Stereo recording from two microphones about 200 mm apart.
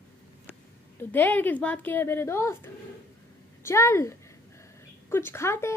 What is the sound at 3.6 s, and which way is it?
Speech, 15° left (ahead or behind).